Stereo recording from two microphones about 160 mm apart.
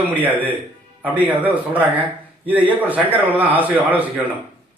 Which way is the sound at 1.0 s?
10° right (ahead or behind).